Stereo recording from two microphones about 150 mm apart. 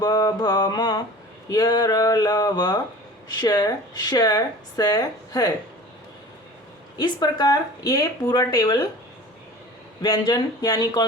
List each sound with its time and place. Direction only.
0.0 s speech: 25° left (ahead or behind)
6.9 s speech: 30° left (ahead or behind)
10.0 s speech: 30° left (ahead or behind)